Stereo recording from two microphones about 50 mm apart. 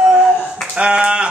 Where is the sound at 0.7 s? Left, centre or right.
Right.